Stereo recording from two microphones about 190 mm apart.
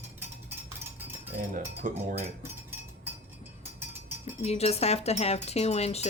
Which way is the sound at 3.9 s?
10° right (ahead or behind).